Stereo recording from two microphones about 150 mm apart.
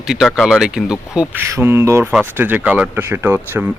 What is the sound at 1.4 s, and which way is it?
Speech, 15° right (ahead or behind).